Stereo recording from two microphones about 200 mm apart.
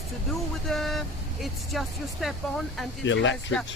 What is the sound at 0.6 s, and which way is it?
Speech, centre (ahead or behind).